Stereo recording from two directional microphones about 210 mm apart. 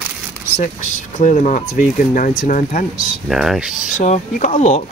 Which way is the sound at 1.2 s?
35° left (ahead or behind).